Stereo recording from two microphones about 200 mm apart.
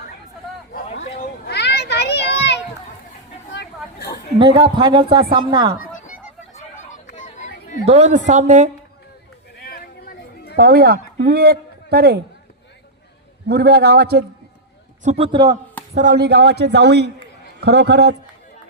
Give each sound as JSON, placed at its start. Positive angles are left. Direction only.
{"t": 0.9, "sound": "children playing", "side_deg": 55}
{"t": 3.5, "sound": "a sound", "side_deg": 55}
{"t": 4.4, "sound": "speech", "side_deg": -25}
{"t": 7.2, "sound": "a sound", "side_deg": 40}
{"t": 7.9, "sound": "a woman's voice", "side_deg": -35}
{"t": 9.6, "sound": "a sound", "side_deg": 50}
{"t": 10.6, "sound": "a man's voice", "side_deg": -50}
{"t": 13.5, "sound": "a man's voice", "side_deg": -55}
{"t": 15.0, "sound": "speech", "side_deg": -30}
{"t": 16.0, "sound": "speech", "side_deg": -45}